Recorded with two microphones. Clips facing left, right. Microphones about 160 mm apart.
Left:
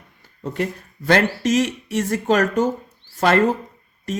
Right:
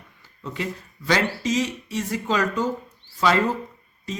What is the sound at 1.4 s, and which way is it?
Speech, 75° left (ahead or behind).